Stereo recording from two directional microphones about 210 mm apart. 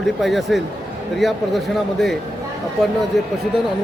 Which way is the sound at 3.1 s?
Centre (ahead or behind).